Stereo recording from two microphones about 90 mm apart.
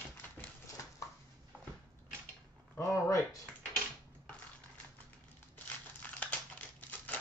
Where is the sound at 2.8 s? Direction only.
35° left (ahead or behind).